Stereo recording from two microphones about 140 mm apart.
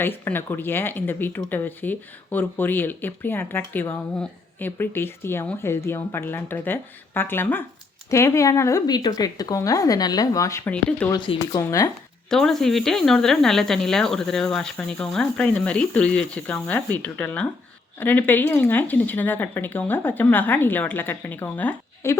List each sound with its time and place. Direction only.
0.0 s speech: 15° left (ahead or behind)
10.7 s speech: 10° left (ahead or behind)
11.1 s speech: 30° left (ahead or behind)
12.3 s speech: 5° left (ahead or behind)